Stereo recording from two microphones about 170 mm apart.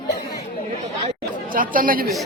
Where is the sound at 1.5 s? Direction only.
55° right (ahead or behind).